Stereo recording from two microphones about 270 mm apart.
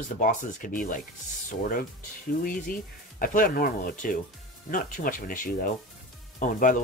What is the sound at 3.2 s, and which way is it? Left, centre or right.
Speech, left.